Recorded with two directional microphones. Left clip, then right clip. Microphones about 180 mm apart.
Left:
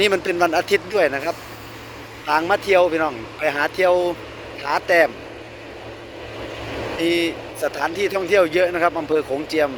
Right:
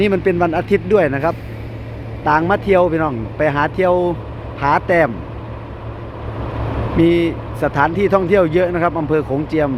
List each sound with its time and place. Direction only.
0.0 s speech: 5° right (ahead or behind)
7.0 s speech: 15° right (ahead or behind)